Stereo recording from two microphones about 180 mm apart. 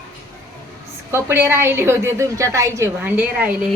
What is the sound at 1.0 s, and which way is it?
A woman's voice, 10° right (ahead or behind).